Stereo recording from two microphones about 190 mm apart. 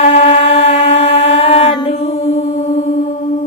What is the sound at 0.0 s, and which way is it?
Mantra, 35° left (ahead or behind).